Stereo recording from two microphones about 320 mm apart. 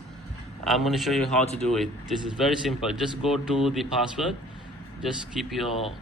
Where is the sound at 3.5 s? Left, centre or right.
Centre.